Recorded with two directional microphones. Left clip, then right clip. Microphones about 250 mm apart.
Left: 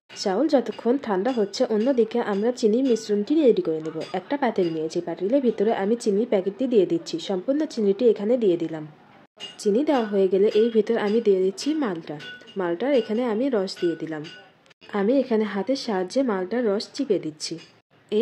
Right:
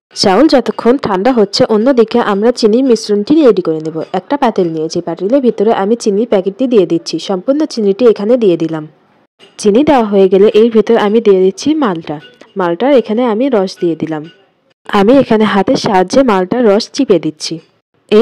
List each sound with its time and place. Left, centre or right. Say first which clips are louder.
0.1 s speech: right 14 dB; right